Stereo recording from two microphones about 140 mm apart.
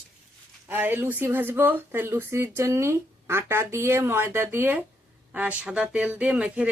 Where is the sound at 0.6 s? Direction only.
15° right (ahead or behind).